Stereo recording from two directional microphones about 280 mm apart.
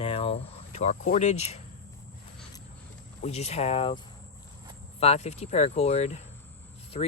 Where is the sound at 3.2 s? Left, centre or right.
Left.